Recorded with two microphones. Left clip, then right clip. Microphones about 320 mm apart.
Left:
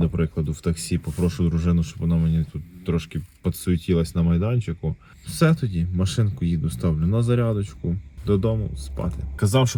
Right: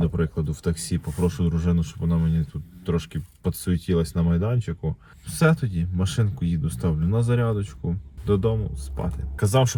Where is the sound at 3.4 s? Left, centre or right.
Centre.